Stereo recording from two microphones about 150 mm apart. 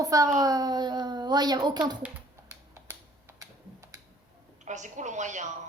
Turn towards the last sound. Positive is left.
turn(degrees=-55)  # may be behind; listen again after turning